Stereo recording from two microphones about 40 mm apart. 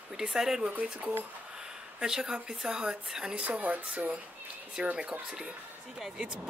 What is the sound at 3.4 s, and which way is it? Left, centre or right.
Speech, right.